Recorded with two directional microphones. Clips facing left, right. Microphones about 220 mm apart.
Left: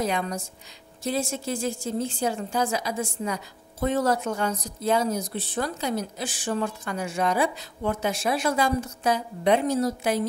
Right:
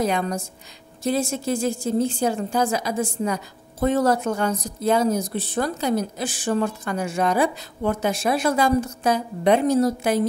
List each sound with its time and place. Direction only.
0.0 s speech: 50° right (ahead or behind)